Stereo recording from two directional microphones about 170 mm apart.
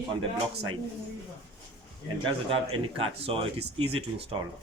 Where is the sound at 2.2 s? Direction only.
30° right (ahead or behind).